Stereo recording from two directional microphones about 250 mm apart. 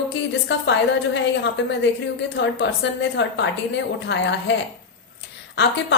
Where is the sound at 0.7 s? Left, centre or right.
Left.